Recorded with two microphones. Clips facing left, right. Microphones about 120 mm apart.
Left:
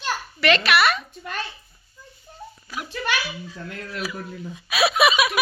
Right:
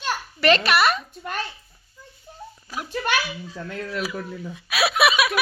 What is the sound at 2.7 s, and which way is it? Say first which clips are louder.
Speech: right 2 dB; 40° right (ahead or behind).